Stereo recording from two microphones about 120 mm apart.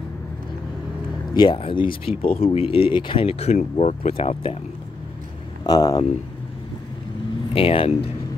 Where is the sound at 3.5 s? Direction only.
70° left (ahead or behind); by 4.5 s 55° left (ahead or behind).